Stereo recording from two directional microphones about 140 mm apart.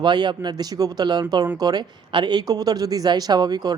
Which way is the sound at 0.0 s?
35° right (ahead or behind).